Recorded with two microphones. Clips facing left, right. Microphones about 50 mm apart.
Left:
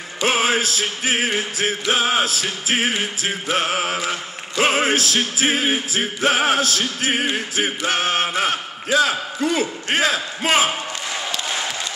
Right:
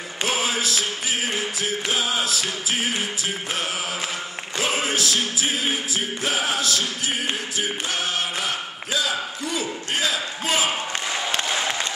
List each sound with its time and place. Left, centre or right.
0.2 s music: left